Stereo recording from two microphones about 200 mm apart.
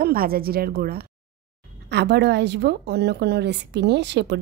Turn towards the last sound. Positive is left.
turn(degrees=-60)  # may be behind; listen again after turning